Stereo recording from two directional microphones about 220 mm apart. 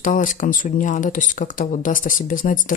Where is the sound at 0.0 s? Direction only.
35° left (ahead or behind).